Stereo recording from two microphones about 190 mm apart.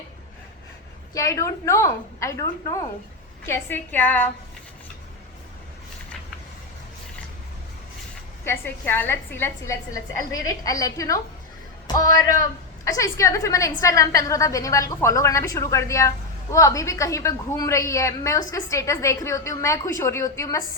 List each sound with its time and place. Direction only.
1.1 s a woman's voice: 15° left (ahead or behind)
8.4 s a woman's voice: 10° left (ahead or behind)